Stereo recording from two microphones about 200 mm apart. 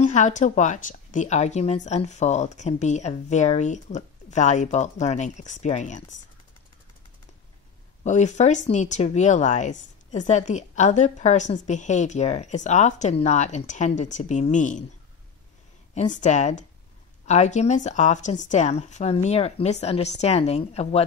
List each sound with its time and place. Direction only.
0.0 s speech: 35° left (ahead or behind)
8.0 s speech: 35° left (ahead or behind)
15.9 s speech: 35° left (ahead or behind)